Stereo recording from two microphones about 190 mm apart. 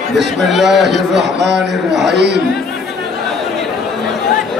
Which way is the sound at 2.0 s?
65° right (ahead or behind).